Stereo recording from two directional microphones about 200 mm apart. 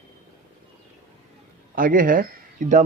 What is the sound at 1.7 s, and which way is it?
Speech, 45° right (ahead or behind).